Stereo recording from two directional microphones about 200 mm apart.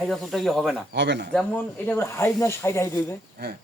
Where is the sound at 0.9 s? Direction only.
60° right (ahead or behind).